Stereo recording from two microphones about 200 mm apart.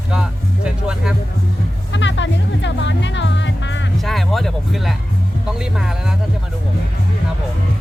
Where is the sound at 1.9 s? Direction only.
65° left (ahead or behind).